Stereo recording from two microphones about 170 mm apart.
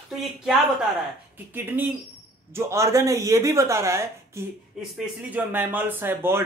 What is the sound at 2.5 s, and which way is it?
Speech, 15° right (ahead or behind).